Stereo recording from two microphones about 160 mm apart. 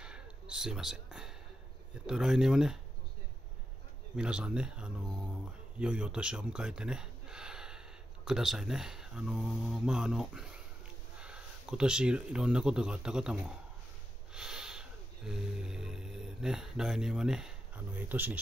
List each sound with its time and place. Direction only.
0.0 s a sound: 5° right (ahead or behind)
2.0 s speech: 5° right (ahead or behind)
4.2 s speech: 5° right (ahead or behind)
14.3 s music: 5° right (ahead or behind)